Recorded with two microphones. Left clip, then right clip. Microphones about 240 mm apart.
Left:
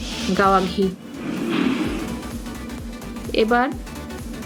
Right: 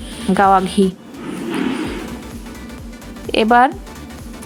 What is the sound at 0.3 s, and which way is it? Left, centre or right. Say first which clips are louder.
Speech: right 5 dB; right.